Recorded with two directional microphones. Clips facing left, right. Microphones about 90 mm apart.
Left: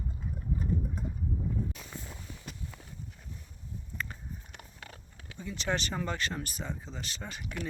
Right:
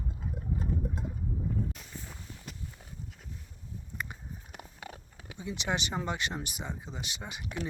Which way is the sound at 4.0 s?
15° right (ahead or behind).